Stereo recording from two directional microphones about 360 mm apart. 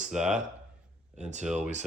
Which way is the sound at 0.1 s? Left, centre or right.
Centre.